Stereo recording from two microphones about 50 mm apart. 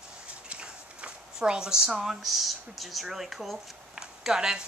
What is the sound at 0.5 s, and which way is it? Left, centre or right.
Speech, right.